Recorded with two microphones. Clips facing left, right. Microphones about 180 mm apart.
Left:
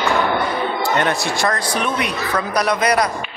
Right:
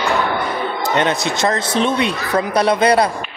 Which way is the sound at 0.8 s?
20° right (ahead or behind).